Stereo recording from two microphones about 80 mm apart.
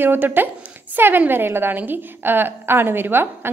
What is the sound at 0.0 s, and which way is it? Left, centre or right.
A woman's voice, right.